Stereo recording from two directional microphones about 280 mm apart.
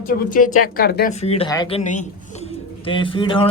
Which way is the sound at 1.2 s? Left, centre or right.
Left.